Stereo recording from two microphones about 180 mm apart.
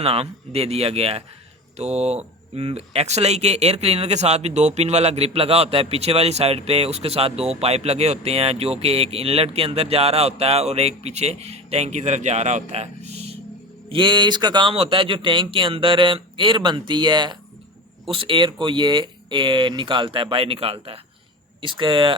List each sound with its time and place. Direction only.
0.0 s speech: 35° right (ahead or behind)
13.9 s a man's voice: 25° right (ahead or behind)